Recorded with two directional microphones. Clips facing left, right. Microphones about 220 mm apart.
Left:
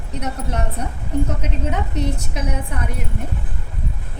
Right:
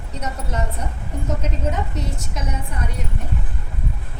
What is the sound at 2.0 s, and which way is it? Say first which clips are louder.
Speech: left 5 dB; 60° left (ahead or behind).